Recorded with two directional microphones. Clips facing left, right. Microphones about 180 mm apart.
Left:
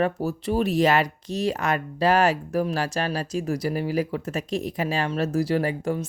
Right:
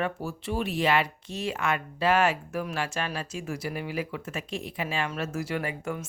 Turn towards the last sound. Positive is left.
turn(degrees=35)  # may be behind; listen again after turning